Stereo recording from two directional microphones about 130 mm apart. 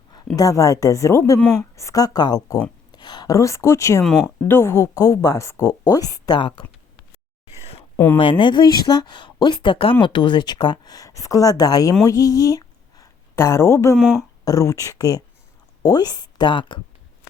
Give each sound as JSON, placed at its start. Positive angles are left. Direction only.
{"t": 0.3, "sound": "a woman's voice", "side_deg": 25}
{"t": 4.0, "sound": "speech", "side_deg": 0}
{"t": 4.4, "sound": "a woman's voice", "side_deg": 20}
{"t": 7.6, "sound": "a sound", "side_deg": 50}
{"t": 7.9, "sound": "speech", "side_deg": 15}
{"t": 8.2, "sound": "a woman's voice", "side_deg": 40}